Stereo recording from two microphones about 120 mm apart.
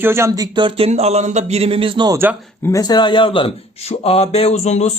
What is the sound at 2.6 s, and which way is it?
A man's voice, 30° left (ahead or behind).